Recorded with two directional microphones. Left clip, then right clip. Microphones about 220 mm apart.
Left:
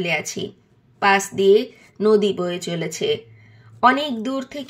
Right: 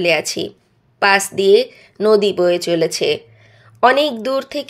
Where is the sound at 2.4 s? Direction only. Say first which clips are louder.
Right 11 dB; 20° right (ahead or behind).